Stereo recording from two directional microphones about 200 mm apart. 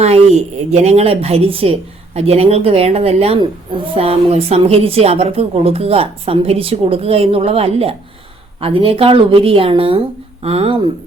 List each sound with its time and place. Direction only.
0.0 s a woman's voice: 35° right (ahead or behind)